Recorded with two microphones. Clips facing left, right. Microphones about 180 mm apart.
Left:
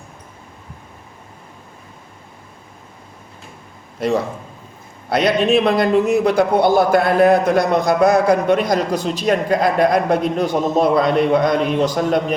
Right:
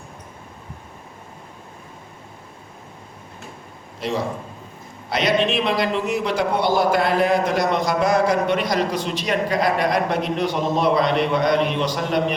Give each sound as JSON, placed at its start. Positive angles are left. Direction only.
{"t": 5.0, "sound": "a man's voice", "side_deg": 55}